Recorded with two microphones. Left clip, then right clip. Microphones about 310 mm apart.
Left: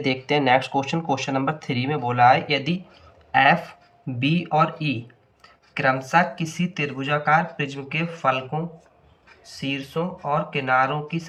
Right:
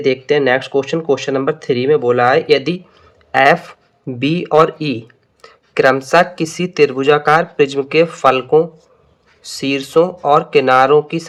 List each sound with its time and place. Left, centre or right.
0.0 s speech: centre